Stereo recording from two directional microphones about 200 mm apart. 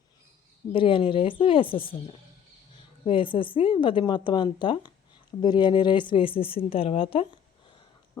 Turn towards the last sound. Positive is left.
turn(degrees=25)  # may be behind; listen again after turning